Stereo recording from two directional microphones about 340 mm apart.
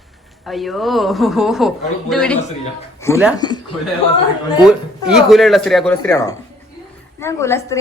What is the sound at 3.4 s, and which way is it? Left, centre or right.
Speech, centre.